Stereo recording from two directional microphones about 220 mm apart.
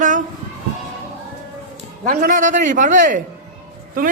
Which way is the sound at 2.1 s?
40° right (ahead or behind).